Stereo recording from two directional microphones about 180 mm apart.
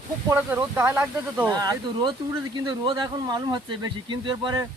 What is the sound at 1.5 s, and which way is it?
Speech, 20° right (ahead or behind).